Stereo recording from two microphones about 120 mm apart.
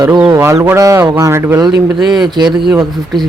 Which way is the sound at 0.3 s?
25° right (ahead or behind).